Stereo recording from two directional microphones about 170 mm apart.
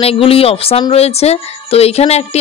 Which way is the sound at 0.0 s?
35° left (ahead or behind).